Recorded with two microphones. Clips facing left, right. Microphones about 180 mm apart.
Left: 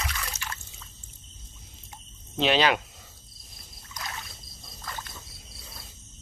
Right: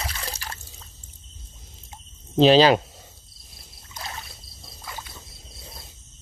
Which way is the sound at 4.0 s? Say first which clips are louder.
Right 2 dB; 25° right (ahead or behind).